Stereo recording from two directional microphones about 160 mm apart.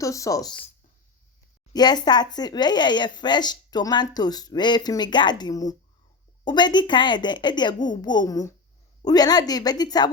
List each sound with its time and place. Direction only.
0.0 s speech: 20° left (ahead or behind)
1.7 s speech: 25° left (ahead or behind)